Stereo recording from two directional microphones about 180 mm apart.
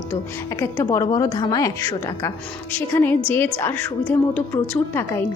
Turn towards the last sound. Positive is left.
turn(degrees=10)  # may be behind; listen again after turning